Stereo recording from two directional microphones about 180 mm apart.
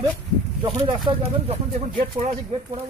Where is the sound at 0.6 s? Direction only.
25° right (ahead or behind).